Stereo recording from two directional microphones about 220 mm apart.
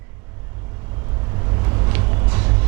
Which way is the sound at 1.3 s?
25° right (ahead or behind).